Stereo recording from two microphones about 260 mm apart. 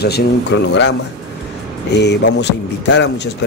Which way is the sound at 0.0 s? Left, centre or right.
Left.